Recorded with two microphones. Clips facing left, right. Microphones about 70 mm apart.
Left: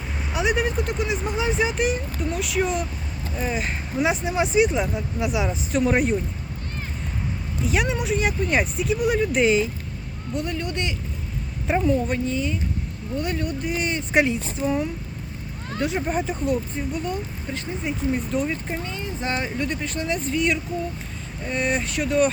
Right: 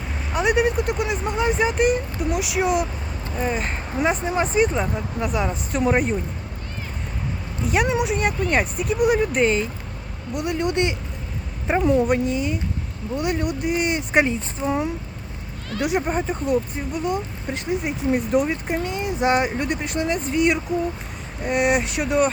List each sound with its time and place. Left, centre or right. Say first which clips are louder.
0.3 s speech: right 3 dB; centre
7.6 s speech: right 3 dB; centre
10.3 s speech: right 2 dB; centre
10.6 s speech: right 6 dB; right; by 14.8 s centre
15.8 s speech: right 3 dB; centre
16.0 s speech: right 1 dB; centre